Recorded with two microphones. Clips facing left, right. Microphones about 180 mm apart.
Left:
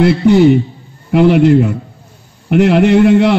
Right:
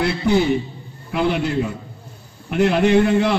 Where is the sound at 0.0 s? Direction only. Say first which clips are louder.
Left 10 dB; 70° left (ahead or behind).